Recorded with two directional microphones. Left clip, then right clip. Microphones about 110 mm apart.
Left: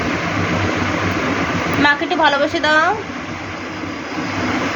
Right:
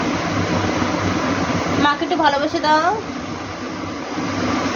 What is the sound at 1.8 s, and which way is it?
Speech, 20° left (ahead or behind).